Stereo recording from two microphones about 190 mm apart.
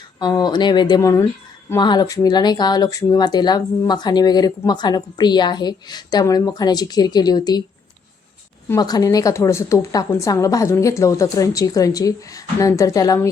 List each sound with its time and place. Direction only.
0.2 s speech: 20° left (ahead or behind)
8.7 s a woman's voice: 20° left (ahead or behind)